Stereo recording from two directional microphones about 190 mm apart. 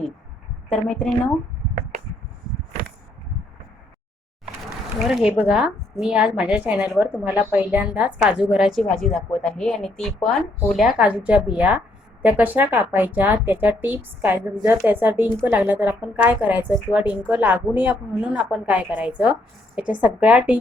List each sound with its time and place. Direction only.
0.7 s a woman's voice: 5° left (ahead or behind)
4.9 s a woman's voice: centre (ahead or behind)